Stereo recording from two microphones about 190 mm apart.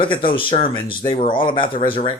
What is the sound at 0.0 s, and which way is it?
Speech, 25° left (ahead or behind).